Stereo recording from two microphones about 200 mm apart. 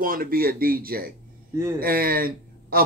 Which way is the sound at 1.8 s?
50° right (ahead or behind).